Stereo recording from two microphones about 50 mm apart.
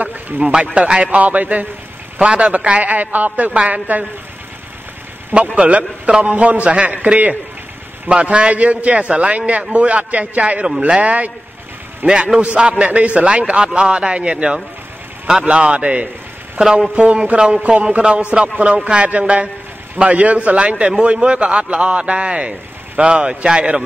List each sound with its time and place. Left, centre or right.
0.0 s speech: right
0.7 s a man's voice: centre
1.2 s a man's voice: right
2.1 s a man's voice: centre
5.5 s a man's voice: right
12.1 s a man's voice: centre
12.4 s a man's voice: right